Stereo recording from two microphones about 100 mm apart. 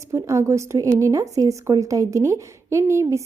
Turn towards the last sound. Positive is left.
turn(degrees=-30)  # may be behind; listen again after turning